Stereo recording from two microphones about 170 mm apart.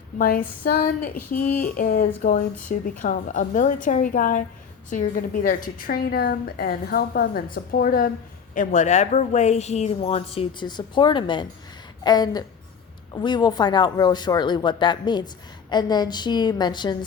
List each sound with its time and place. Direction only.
0.2 s a woman's voice: 55° left (ahead or behind)
8.5 s a woman's voice: 50° left (ahead or behind); by 17.0 s 25° left (ahead or behind)